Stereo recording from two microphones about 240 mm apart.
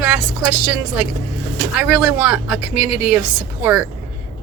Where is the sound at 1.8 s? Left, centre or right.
Centre.